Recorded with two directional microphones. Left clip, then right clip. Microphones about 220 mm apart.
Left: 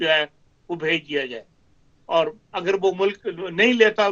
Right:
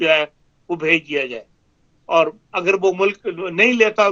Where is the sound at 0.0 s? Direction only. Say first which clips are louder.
Right 4 dB; 25° right (ahead or behind).